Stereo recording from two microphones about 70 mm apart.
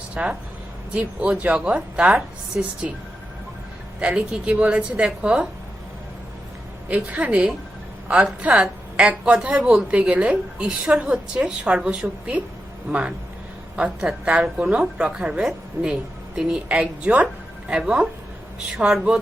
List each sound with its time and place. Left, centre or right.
0.1 s speech: centre
4.0 s a woman's voice: centre
6.8 s a woman's voice: right